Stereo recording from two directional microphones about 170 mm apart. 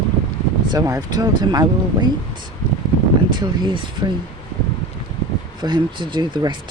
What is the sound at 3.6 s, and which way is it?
Speech, 25° right (ahead or behind).